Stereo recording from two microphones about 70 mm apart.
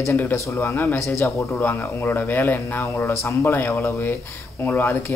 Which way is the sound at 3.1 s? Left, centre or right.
Left.